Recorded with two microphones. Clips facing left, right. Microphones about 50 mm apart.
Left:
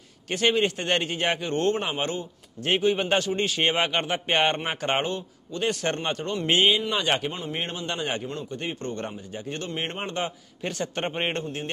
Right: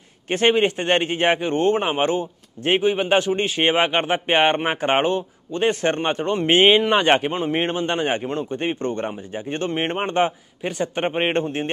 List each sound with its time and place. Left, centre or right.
0.3 s a man's voice: right
10.6 s a man's voice: centre